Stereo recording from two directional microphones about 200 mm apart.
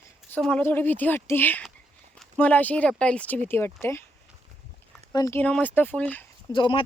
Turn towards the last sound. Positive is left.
turn(degrees=25)  # may be behind; listen again after turning